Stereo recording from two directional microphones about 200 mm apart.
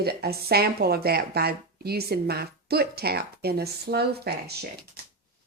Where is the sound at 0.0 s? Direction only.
50° right (ahead or behind).